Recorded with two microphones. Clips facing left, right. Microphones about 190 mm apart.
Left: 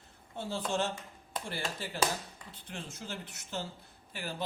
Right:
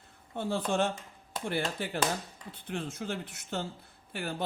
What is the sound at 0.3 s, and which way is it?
A man's voice, 55° right (ahead or behind).